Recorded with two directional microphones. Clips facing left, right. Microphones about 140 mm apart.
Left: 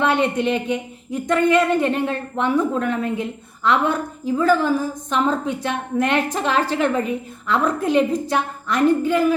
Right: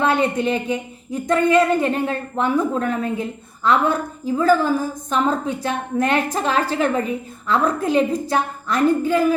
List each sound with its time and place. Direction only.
0.0 s a woman's voice: 40° right (ahead or behind)